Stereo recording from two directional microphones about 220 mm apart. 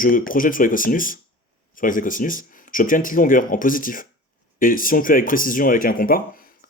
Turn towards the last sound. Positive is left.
turn(degrees=40)  # may be behind; listen again after turning